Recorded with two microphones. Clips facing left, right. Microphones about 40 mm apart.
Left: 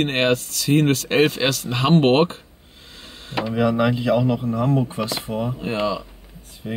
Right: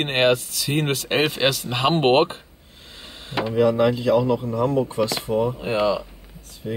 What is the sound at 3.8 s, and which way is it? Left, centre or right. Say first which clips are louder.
Speech: right 1 dB; left.